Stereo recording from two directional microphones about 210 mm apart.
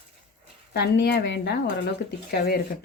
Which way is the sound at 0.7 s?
50° left (ahead or behind).